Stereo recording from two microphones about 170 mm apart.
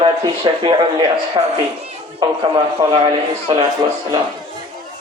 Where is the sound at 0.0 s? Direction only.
30° right (ahead or behind).